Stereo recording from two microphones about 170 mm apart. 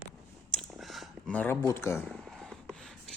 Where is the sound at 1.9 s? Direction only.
Centre (ahead or behind).